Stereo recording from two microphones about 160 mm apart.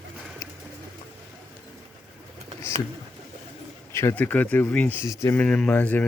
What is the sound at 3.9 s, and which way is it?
Speech, 15° left (ahead or behind).